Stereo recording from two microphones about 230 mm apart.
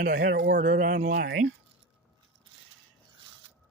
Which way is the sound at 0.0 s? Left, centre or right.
Right.